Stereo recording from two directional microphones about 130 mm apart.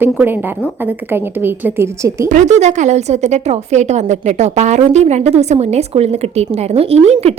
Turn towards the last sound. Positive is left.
turn(degrees=-55)  # may be behind; listen again after turning